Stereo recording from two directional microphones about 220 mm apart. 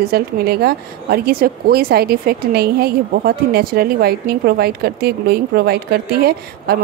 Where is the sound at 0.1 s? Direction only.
45° right (ahead or behind).